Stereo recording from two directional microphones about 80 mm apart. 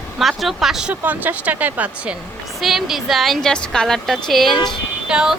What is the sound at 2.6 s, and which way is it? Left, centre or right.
A woman's voice, centre.